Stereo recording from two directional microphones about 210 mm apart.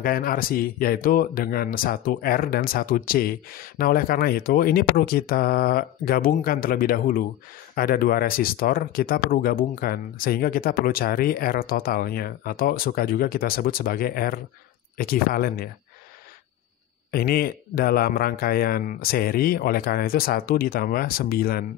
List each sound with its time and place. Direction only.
0.0 s speech: 45° left (ahead or behind)
17.1 s speech: 45° left (ahead or behind)